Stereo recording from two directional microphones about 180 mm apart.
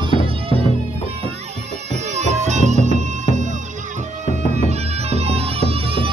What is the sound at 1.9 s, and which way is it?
Music, 40° right (ahead or behind).